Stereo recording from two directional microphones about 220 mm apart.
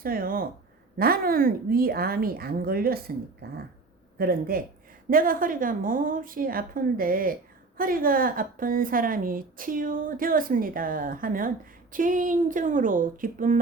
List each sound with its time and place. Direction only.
0.0 s a woman's voice: 40° right (ahead or behind)